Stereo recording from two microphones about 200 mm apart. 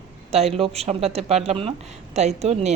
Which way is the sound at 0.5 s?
30° right (ahead or behind).